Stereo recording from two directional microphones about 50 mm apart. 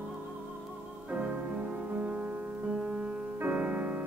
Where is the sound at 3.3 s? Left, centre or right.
Right.